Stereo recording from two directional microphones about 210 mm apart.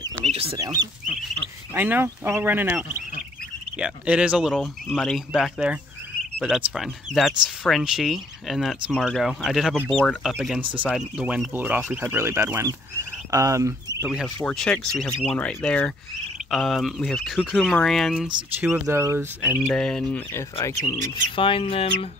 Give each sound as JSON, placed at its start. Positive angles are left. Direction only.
{"t": 0.2, "sound": "chicken", "side_deg": -25}
{"t": 0.6, "sound": "speech", "side_deg": -20}
{"t": 14.1, "sound": "speech", "side_deg": 0}
{"t": 19.7, "sound": "speech", "side_deg": 5}
{"t": 21.1, "sound": "speech", "side_deg": 25}